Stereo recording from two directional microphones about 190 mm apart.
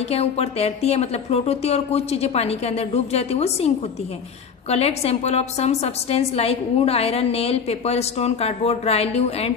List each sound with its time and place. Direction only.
0.1 s a woman's voice: 30° left (ahead or behind)